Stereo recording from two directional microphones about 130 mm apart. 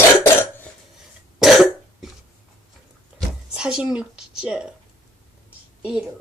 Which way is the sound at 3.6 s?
5° right (ahead or behind).